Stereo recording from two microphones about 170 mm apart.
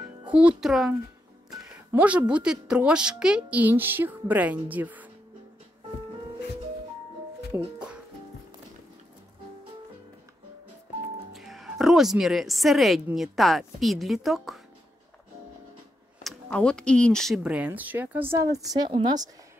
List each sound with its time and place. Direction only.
0.3 s a woman's voice: 5° right (ahead or behind)
7.5 s music: 5° right (ahead or behind)
11.3 s speech: centre (ahead or behind)
16.3 s a woman's voice: 5° left (ahead or behind); by 19.1 s 30° right (ahead or behind)